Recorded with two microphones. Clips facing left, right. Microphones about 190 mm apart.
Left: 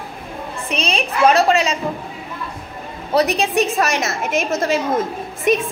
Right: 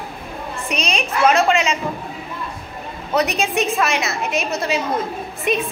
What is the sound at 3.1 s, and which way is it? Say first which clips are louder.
A woman's voice: left 3 dB; 35° left (ahead or behind).